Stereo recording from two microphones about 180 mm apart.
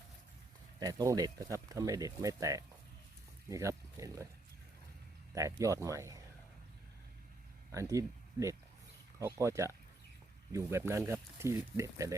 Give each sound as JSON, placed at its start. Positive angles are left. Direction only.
{"t": 0.8, "sound": "speech", "side_deg": -20}
{"t": 5.3, "sound": "speech", "side_deg": -15}
{"t": 7.7, "sound": "speech", "side_deg": -15}